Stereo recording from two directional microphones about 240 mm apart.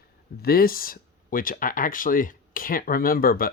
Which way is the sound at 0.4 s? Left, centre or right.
Left.